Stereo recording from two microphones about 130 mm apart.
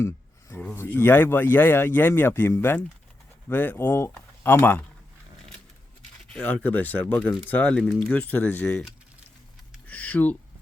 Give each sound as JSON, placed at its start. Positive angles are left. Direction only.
{"t": 0.5, "sound": "speech", "side_deg": 15}
{"t": 6.3, "sound": "speech", "side_deg": 15}
{"t": 9.8, "sound": "speech", "side_deg": 10}